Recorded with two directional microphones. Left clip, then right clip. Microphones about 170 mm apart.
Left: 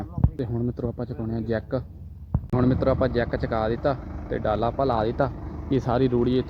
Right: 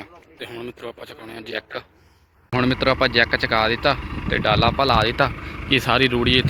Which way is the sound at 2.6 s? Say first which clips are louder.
Right 4 dB; 30° right (ahead or behind).